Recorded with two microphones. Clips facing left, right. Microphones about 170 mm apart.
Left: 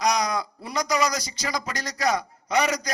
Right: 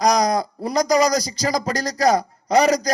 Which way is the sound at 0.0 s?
40° right (ahead or behind).